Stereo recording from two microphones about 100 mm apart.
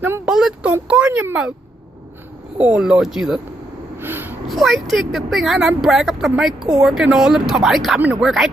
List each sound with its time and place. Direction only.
0.2 s speech: 5° right (ahead or behind)
2.5 s speech: 10° right (ahead or behind)
4.0 s gasp: 20° right (ahead or behind)
4.5 s speech: centre (ahead or behind)